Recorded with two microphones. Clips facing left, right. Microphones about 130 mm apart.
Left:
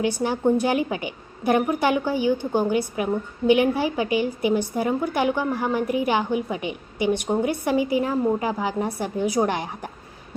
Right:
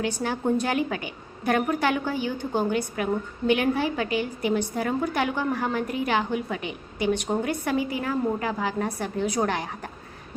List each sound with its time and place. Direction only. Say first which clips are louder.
0.0 s a woman's voice: left 5 dB; 20° left (ahead or behind)